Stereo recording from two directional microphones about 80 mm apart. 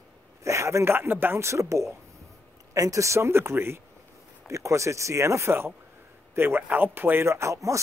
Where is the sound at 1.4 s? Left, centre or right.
Right.